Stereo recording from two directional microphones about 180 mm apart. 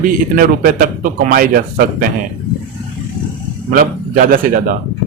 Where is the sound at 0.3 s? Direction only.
55° right (ahead or behind).